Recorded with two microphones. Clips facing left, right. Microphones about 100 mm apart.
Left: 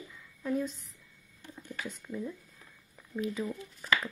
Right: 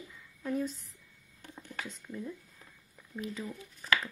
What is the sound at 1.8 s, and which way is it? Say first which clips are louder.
Speech: left 6 dB; 10° left (ahead or behind).